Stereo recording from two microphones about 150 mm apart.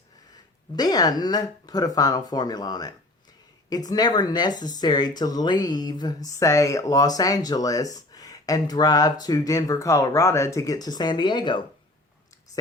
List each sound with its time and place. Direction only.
0.8 s speech: 25° left (ahead or behind)